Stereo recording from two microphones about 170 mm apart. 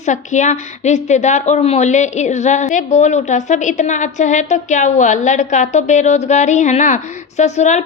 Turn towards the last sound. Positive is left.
turn(degrees=45)  # may be behind; listen again after turning